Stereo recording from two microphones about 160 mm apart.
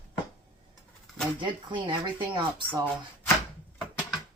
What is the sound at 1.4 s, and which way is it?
Speech, 30° right (ahead or behind).